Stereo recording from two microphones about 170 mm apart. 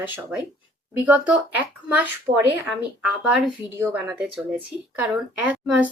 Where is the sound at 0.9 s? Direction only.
10° right (ahead or behind).